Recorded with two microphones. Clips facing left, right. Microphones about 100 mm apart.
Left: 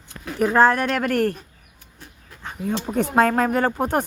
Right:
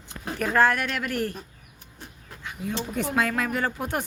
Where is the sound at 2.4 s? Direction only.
45° left (ahead or behind).